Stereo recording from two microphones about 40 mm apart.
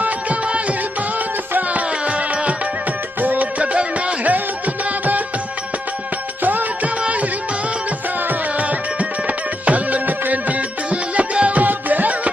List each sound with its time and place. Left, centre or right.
0.0 s music: right
1.7 s music: right
3.2 s music: right
6.4 s music: right
9.7 s music: right
10.9 s music: right